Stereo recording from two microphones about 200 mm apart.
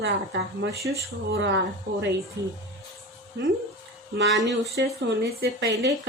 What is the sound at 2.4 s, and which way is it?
Speech, 55° right (ahead or behind).